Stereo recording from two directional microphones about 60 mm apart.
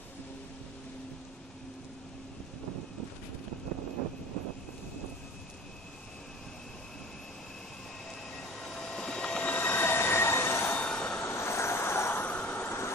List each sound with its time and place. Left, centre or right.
8.4 s train: centre
9.4 s train wheels squealing: left
10.8 s train: centre
11.2 s vehicle: left
12.3 s vehicle: left
12.6 s vehicle: left